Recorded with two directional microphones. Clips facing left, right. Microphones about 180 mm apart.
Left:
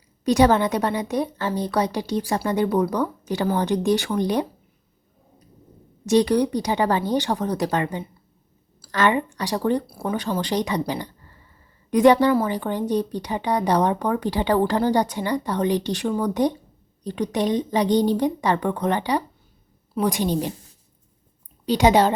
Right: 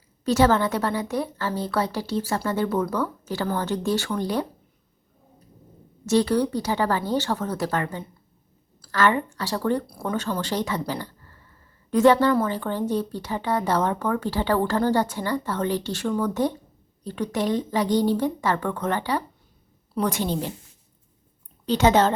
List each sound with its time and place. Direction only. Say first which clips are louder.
0.3 s speech: left 2 dB; 15° left (ahead or behind)
6.1 s a woman's voice: left 2 dB; 15° left (ahead or behind)
21.7 s speech: left 2 dB; 15° left (ahead or behind)